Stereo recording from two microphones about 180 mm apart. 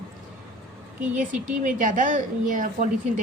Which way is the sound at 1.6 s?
45° right (ahead or behind).